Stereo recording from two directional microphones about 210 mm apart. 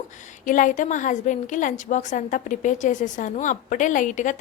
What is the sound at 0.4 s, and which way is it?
A woman's voice, 40° left (ahead or behind).